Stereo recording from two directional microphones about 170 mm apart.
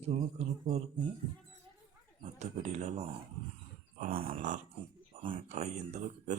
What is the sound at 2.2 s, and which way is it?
A man's voice, 40° right (ahead or behind).